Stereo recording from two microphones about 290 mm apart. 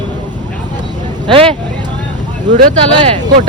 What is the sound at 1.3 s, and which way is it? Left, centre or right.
Speech, centre.